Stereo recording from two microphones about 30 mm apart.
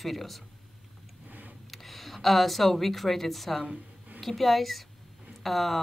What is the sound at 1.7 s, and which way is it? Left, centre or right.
A woman's voice, centre.